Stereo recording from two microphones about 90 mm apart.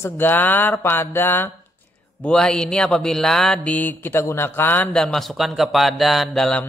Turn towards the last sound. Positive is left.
turn(degrees=5)  # may be behind; listen again after turning